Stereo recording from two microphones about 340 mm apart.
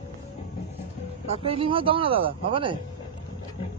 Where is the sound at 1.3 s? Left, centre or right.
Centre.